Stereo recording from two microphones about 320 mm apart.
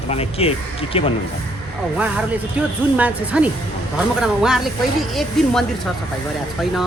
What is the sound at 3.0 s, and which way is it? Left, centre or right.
A man's voice, centre.